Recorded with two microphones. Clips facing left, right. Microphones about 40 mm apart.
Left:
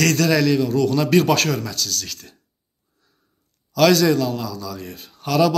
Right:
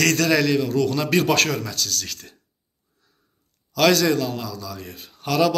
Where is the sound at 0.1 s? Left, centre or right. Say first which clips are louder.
Left 1 dB; right.